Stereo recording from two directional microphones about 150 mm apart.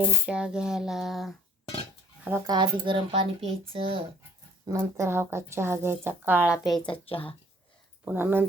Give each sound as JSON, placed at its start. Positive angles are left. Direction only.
{"t": 0.0, "sound": "speech", "side_deg": -5}
{"t": 2.5, "sound": "speech", "side_deg": -30}
{"t": 4.6, "sound": "a woman's voice", "side_deg": -20}
{"t": 6.7, "sound": "speech", "side_deg": 5}
{"t": 6.9, "sound": "speech", "side_deg": 35}
{"t": 8.0, "sound": "a woman's voice", "side_deg": -15}